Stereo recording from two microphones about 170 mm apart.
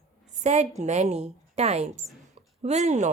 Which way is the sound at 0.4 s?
40° right (ahead or behind).